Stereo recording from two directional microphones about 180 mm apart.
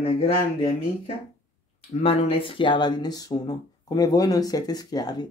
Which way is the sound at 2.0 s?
30° left (ahead or behind).